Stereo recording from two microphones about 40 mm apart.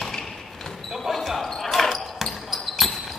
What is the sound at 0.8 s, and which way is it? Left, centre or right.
Basketball bounce, centre.